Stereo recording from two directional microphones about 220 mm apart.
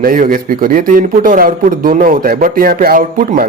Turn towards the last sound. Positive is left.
turn(degrees=-40)  # may be behind; listen again after turning